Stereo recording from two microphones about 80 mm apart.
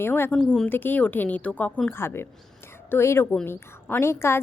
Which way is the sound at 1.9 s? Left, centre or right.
Left.